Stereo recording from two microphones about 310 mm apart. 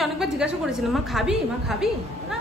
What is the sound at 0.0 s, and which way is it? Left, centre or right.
A woman's voice, centre.